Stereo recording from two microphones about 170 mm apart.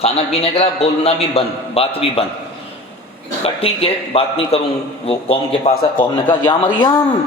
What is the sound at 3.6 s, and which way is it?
A man's voice, 35° left (ahead or behind).